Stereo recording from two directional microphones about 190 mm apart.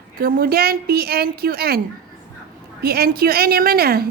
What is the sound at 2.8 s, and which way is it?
A woman's voice, 55° right (ahead or behind).